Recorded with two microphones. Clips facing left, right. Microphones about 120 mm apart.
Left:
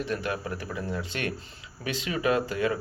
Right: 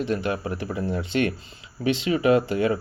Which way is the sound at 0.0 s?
25° right (ahead or behind).